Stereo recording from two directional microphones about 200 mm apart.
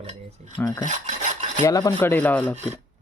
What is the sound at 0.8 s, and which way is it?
Filing, 40° right (ahead or behind).